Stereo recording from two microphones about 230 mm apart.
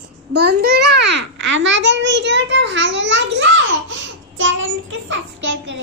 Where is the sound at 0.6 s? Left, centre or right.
Right.